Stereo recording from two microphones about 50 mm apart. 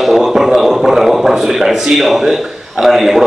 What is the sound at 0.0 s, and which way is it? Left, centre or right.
A man's voice, centre.